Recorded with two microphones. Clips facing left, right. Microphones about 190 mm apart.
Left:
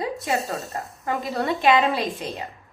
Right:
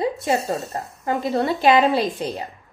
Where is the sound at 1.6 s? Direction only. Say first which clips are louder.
Right 3 dB; 35° right (ahead or behind).